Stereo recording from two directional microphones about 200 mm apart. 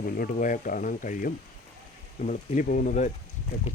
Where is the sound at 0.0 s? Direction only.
45° left (ahead or behind).